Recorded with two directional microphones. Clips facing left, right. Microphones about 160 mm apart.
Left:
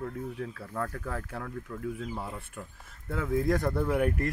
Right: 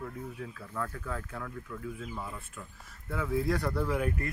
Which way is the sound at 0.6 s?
40° left (ahead or behind).